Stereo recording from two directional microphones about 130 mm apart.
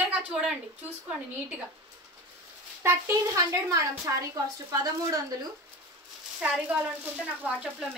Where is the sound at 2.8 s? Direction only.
20° right (ahead or behind).